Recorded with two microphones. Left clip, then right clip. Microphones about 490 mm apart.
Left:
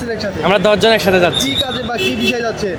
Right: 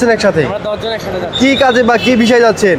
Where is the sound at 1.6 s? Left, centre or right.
Right.